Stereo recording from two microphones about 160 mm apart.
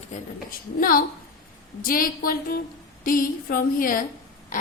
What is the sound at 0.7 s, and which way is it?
A woman's voice, 60° left (ahead or behind).